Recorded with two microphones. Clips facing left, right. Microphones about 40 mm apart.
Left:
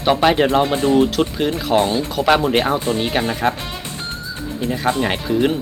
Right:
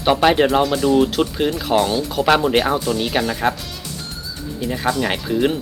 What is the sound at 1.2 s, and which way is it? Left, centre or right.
Speech, centre.